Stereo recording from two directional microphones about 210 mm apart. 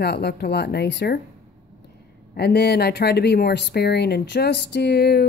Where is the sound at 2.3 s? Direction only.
50° left (ahead or behind).